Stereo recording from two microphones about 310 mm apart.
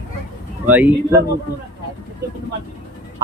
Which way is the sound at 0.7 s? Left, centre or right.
Centre.